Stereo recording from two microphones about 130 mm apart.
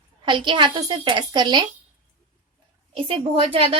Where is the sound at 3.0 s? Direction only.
45° right (ahead or behind).